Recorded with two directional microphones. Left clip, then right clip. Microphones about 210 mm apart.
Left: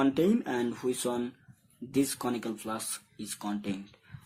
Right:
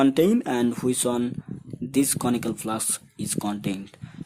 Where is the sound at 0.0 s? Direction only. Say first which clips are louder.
Right 7 dB; 50° right (ahead or behind).